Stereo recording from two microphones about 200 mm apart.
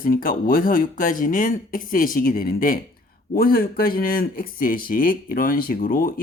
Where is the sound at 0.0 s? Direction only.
45° left (ahead or behind).